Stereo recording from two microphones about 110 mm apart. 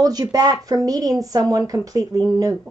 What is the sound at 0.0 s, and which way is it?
Speech, 35° right (ahead or behind).